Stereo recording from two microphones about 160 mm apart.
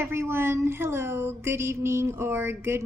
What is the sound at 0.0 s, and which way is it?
A woman's voice, 15° right (ahead or behind).